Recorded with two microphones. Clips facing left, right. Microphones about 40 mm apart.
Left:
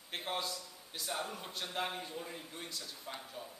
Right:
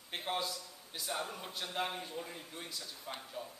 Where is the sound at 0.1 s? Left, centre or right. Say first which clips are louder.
Right 1 dB; centre.